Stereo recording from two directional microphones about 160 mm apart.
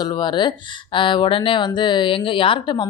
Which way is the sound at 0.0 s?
25° left (ahead or behind).